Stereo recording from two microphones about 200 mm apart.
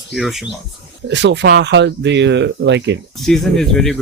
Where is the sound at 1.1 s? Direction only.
60° right (ahead or behind).